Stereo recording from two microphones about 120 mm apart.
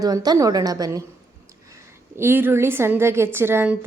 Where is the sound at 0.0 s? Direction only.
30° right (ahead or behind).